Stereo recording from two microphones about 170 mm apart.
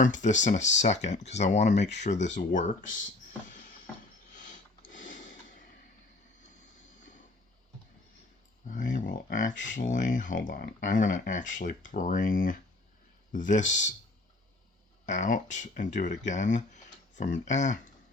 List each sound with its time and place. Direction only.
0.0 s speech: 45° left (ahead or behind)
4.3 s sniff: 50° left (ahead or behind)
4.9 s a sound: 50° left (ahead or behind)
8.7 s speech: 50° left (ahead or behind)
15.0 s speech: 45° left (ahead or behind)